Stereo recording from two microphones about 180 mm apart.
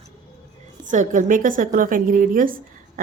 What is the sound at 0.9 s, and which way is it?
A woman's voice, 45° right (ahead or behind).